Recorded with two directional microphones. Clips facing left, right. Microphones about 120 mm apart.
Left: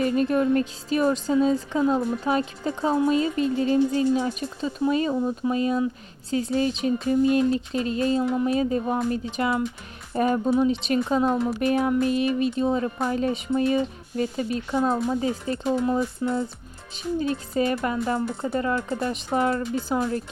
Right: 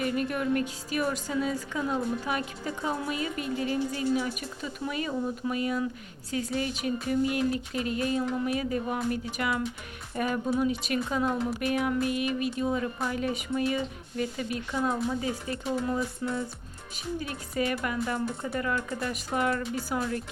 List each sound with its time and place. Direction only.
0.0 s a woman's voice: 30° left (ahead or behind)